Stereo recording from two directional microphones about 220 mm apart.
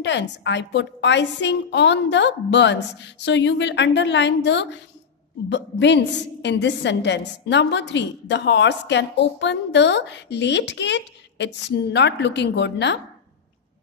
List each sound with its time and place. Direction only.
0.0 s a woman's voice: 55° left (ahead or behind)